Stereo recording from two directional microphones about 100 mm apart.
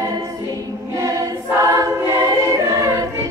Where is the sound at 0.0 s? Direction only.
30° right (ahead or behind).